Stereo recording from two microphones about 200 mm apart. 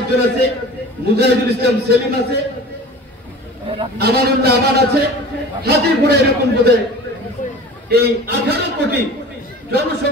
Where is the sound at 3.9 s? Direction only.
55° right (ahead or behind).